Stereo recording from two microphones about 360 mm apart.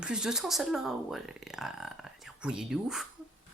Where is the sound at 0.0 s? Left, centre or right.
Centre.